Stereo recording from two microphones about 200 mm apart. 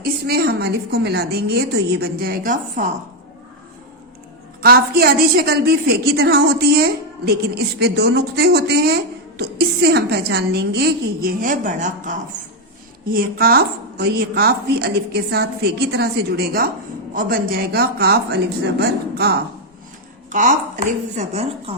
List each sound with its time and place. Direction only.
0.0 s a woman's voice: 50° right (ahead or behind)
4.6 s a woman's voice: 50° right (ahead or behind)
20.3 s a woman's voice: 40° right (ahead or behind)